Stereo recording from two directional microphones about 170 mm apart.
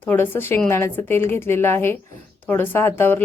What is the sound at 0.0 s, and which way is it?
Speech, 10° left (ahead or behind).